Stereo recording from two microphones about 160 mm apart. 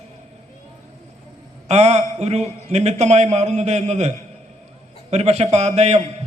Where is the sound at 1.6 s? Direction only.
45° right (ahead or behind).